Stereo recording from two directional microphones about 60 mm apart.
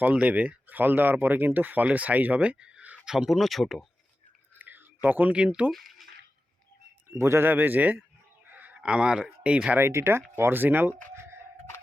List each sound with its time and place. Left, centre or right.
0.0 s speech: right
3.0 s speech: centre
4.5 s a sound: right
5.0 s speech: right
5.3 s speech: centre
5.7 s a sound: centre
7.1 s speech: right
8.4 s a sound: right
8.8 s speech: centre
9.7 s speech: right
10.6 s speech: right